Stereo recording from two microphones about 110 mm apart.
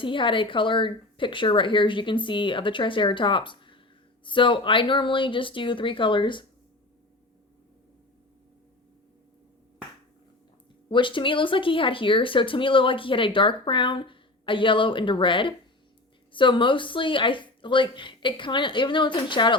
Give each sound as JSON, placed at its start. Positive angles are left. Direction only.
{"t": 0.0, "sound": "speech", "side_deg": 50}
{"t": 10.8, "sound": "speech", "side_deg": 50}